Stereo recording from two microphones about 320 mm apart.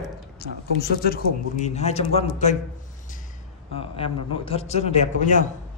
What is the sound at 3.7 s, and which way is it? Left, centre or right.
Speech, centre.